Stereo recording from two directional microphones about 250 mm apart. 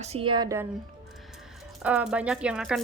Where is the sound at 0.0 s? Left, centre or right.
Right.